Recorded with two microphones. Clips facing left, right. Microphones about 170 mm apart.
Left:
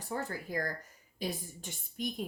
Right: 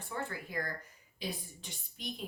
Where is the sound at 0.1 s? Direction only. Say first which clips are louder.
Left 3 dB; 40° left (ahead or behind).